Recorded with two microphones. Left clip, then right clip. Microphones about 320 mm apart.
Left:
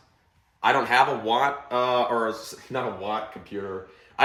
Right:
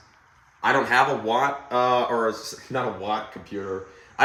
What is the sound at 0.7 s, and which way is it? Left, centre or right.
Speech, centre.